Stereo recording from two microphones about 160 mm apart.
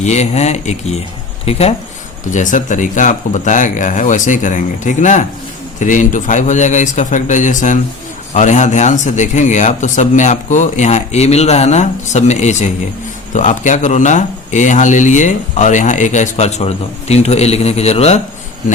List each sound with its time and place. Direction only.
0.0 s speech: 45° left (ahead or behind)
2.3 s speech: 50° left (ahead or behind)